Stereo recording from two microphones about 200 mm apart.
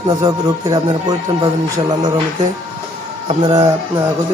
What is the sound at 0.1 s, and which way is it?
Music, 20° right (ahead or behind).